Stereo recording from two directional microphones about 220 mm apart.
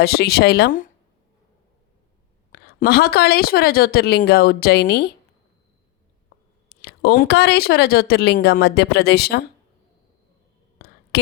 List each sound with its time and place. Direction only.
0.0 s speech: 45° left (ahead or behind)
2.5 s speech: 45° left (ahead or behind)
6.7 s speech: 45° left (ahead or behind)
11.1 s speech: 50° left (ahead or behind)